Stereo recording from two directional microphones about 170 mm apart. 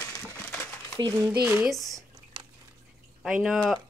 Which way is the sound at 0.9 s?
25° right (ahead or behind).